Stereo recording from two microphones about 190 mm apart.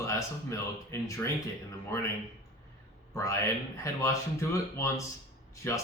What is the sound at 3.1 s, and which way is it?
Speech, 15° left (ahead or behind).